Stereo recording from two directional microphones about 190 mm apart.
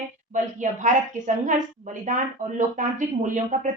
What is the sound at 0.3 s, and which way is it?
Speech, 40° right (ahead or behind).